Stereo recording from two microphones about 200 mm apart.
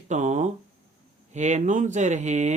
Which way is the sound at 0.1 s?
35° right (ahead or behind).